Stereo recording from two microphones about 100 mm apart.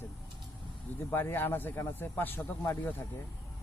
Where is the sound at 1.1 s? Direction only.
20° left (ahead or behind).